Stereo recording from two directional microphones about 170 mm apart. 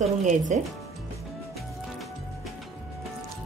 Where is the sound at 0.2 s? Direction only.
45° right (ahead or behind).